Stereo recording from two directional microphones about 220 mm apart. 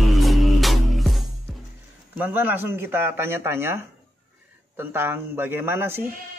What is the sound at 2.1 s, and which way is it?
Speech, 10° right (ahead or behind).